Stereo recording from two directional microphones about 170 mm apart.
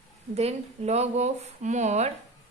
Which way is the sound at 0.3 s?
40° right (ahead or behind).